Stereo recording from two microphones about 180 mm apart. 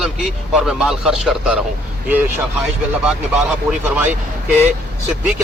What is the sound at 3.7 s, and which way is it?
Speech, 10° right (ahead or behind).